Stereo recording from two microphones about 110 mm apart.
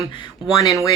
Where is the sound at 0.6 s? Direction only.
30° left (ahead or behind).